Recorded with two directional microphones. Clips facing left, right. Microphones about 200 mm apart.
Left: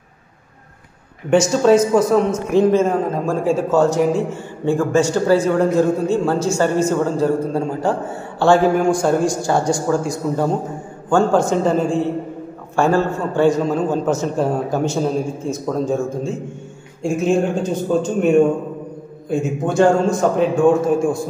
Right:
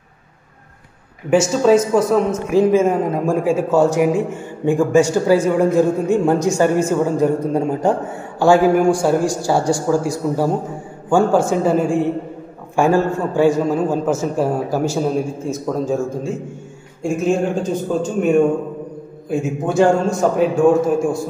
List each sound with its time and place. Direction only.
1.3 s a man's voice: centre (ahead or behind)
19.2 s a man's voice: 5° right (ahead or behind)